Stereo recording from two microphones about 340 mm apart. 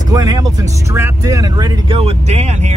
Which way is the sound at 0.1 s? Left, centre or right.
Centre.